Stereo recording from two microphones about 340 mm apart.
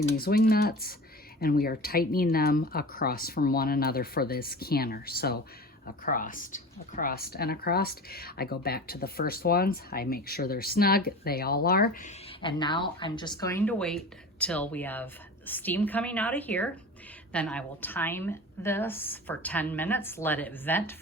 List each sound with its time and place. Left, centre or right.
0.2 s a woman's voice: left; by 20.9 s centre